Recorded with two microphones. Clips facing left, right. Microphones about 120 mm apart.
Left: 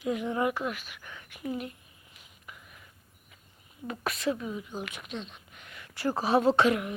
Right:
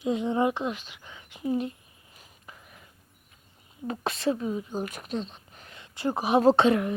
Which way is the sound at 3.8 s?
30° right (ahead or behind).